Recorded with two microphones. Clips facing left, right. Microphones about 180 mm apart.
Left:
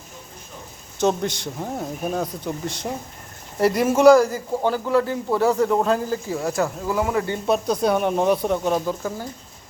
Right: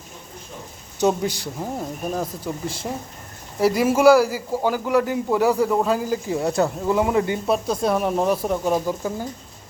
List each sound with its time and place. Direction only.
1.0 s speech: 5° right (ahead or behind)
3.6 s a man's voice: 5° right (ahead or behind)
6.2 s speech: 20° right (ahead or behind)
7.4 s speech: centre (ahead or behind)